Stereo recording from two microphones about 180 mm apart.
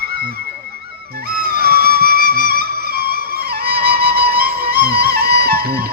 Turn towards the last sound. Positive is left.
turn(degrees=-60)  # may be behind; listen again after turning